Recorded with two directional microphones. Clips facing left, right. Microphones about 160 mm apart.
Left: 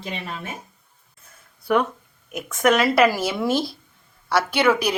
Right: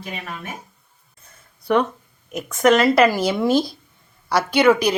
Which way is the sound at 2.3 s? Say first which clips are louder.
Right 3 dB; centre (ahead or behind).